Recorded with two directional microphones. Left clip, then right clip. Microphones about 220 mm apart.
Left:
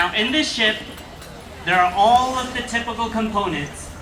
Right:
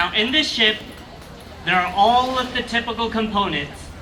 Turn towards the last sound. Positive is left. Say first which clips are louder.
# right 1 dB
turn(degrees=0)  # may be behind; listen again after turning